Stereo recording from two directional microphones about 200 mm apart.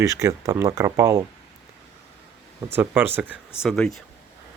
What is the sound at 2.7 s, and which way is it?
Speech, 10° right (ahead or behind).